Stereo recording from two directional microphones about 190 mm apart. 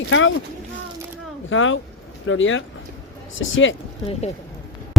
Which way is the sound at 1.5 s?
90° left.